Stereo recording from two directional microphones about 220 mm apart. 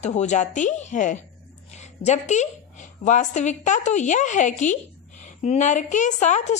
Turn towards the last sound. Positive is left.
turn(degrees=30)  # may be behind; listen again after turning